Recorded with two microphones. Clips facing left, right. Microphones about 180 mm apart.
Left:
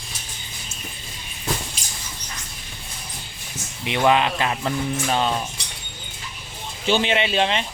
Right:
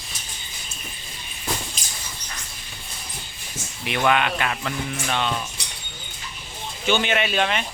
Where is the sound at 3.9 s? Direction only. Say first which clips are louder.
Left 2 dB; 30° left (ahead or behind).